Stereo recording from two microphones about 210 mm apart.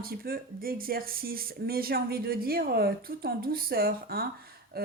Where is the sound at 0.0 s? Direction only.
45° right (ahead or behind).